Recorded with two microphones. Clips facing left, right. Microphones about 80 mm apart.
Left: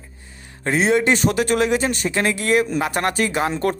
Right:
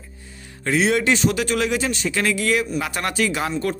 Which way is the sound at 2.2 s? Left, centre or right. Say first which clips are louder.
Left 3 dB; left.